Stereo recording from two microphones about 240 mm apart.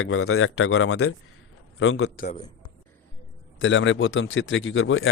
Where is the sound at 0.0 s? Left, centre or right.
Left.